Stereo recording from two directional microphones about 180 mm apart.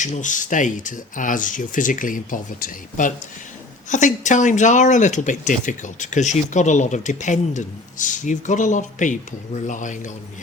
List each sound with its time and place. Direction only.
0.0 s speech: 45° left (ahead or behind)